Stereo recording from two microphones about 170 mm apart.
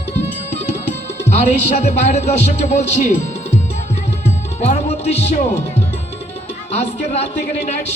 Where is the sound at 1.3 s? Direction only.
40° left (ahead or behind).